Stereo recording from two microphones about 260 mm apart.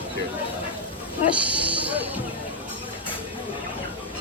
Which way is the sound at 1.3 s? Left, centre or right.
Centre.